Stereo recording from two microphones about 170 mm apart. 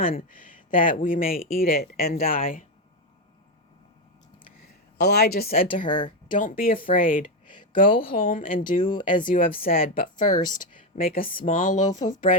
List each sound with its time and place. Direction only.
0.3 s speech: 55° left (ahead or behind)
4.9 s speech: 70° left (ahead or behind); by 5.8 s 55° left (ahead or behind)
5.8 s speech: 25° left (ahead or behind)
6.3 s speech: 55° left (ahead or behind)
8.9 s speech: 30° left (ahead or behind)
9.2 s speech: 55° left (ahead or behind)